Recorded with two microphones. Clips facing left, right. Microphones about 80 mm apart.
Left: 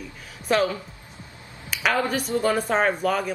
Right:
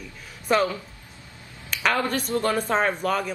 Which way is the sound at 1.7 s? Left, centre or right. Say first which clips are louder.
Left 1 dB; centre.